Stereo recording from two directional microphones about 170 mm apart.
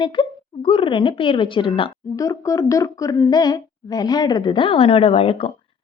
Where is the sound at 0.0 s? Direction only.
30° left (ahead or behind).